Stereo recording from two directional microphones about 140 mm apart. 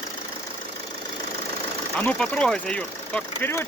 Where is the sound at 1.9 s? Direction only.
10° left (ahead or behind).